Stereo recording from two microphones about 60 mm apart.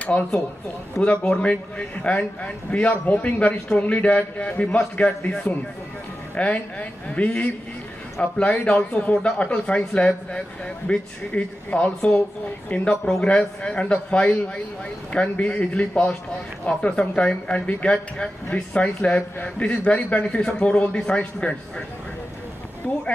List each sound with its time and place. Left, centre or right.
0.0 s a woman's voice: left
6.3 s a woman's voice: left
13.0 s a woman's voice: centre